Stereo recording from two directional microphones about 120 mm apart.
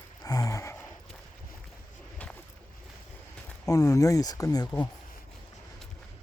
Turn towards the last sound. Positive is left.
turn(degrees=30)  # may be behind; listen again after turning